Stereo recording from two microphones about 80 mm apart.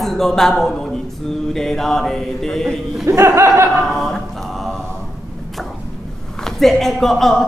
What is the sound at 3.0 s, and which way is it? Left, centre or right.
Speech, right.